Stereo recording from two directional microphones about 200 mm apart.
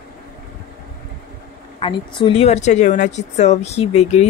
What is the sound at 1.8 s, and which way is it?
A woman's voice, 25° left (ahead or behind).